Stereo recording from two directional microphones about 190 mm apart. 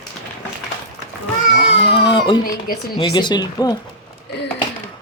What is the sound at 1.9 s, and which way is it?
Baby cry, 25° left (ahead or behind).